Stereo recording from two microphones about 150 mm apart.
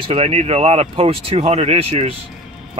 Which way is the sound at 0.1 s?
40° right (ahead or behind).